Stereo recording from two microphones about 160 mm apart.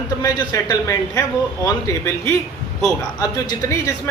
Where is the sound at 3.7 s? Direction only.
20° left (ahead or behind).